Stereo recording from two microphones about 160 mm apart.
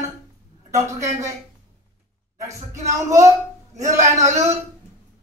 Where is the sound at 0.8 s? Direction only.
20° right (ahead or behind).